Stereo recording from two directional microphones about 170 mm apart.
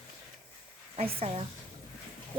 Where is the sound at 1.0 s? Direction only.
35° right (ahead or behind).